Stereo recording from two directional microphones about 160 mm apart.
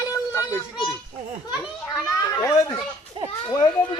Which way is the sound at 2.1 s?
20° left (ahead or behind).